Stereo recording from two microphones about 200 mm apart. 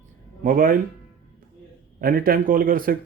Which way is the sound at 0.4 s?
45° right (ahead or behind).